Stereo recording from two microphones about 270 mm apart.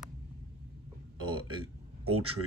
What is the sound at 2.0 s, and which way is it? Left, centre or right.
Speech, right.